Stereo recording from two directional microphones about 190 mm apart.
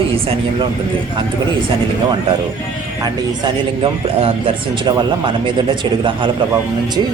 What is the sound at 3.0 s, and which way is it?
Speech, 20° right (ahead or behind).